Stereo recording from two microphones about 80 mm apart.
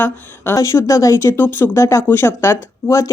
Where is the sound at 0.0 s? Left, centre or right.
Left.